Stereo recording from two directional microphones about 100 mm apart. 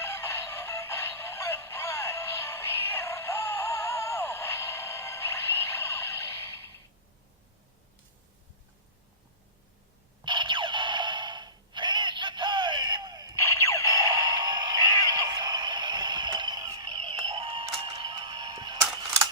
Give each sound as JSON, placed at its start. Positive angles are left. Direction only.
{"t": 0.0, "sound": "synthetic singing", "side_deg": 25}
{"t": 10.2, "sound": "a sound", "side_deg": -50}
{"t": 13.3, "sound": "music", "side_deg": 30}
{"t": 14.3, "sound": "music", "side_deg": -50}